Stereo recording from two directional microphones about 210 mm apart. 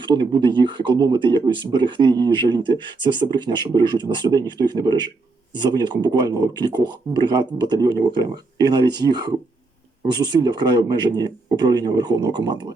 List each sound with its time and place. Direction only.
0.0 s speech: 20° right (ahead or behind)